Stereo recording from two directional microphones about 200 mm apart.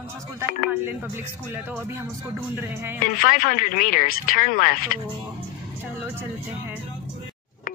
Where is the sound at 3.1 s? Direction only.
45° left (ahead or behind).